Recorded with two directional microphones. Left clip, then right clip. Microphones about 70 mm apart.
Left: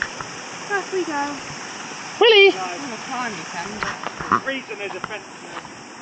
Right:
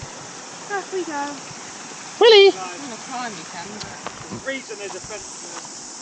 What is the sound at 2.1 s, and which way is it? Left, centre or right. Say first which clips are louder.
Speech: right 1 dB; centre.